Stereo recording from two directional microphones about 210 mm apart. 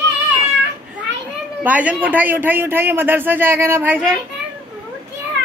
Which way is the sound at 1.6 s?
5° right (ahead or behind).